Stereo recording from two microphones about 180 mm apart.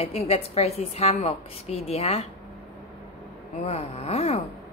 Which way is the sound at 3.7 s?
35° left (ahead or behind).